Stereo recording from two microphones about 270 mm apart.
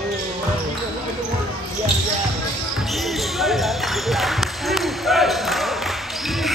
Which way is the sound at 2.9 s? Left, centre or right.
Centre.